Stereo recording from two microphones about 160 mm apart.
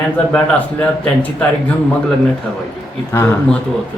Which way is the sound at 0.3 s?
10° left (ahead or behind).